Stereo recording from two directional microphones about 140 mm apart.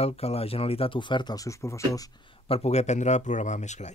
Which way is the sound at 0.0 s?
45° left (ahead or behind).